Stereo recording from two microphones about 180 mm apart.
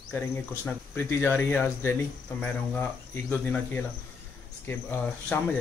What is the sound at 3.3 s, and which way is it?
Speech, 5° left (ahead or behind).